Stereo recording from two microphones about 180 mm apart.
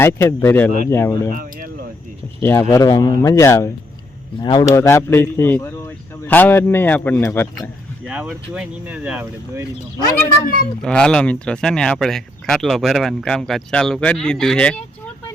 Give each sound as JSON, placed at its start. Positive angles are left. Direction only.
{"t": 0.0, "sound": "speech", "side_deg": 15}
{"t": 1.3, "sound": "speech", "side_deg": -55}
{"t": 2.4, "sound": "speech", "side_deg": 15}
{"t": 8.0, "sound": "speech", "side_deg": -5}
{"t": 10.8, "sound": "speech", "side_deg": 5}